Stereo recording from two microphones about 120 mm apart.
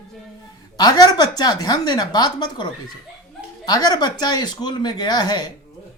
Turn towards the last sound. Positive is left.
turn(degrees=35)  # may be behind; listen again after turning